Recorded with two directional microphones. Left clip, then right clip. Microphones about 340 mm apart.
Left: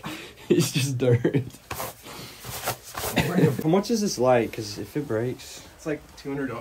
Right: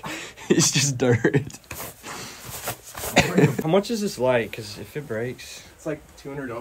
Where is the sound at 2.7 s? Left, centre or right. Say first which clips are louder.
Left 2 dB; centre.